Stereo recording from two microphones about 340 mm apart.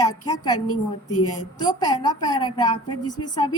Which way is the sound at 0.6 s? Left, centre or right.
Left.